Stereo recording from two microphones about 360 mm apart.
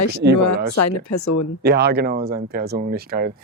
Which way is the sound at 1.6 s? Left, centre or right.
Right.